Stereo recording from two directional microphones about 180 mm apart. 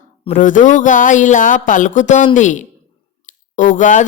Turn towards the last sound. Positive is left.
turn(degrees=45)  # may be behind; listen again after turning